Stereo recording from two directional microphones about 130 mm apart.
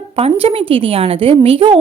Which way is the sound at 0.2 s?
45° right (ahead or behind).